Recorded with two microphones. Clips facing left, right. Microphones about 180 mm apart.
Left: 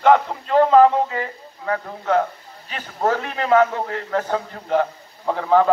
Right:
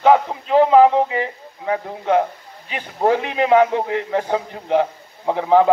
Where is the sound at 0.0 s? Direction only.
10° right (ahead or behind).